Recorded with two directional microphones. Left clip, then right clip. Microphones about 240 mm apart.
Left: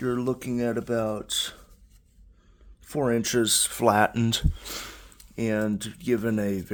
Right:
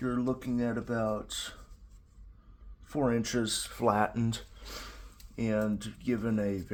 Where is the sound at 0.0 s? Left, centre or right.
Left.